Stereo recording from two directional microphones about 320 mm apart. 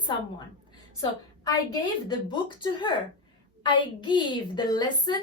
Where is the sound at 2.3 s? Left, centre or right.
Centre.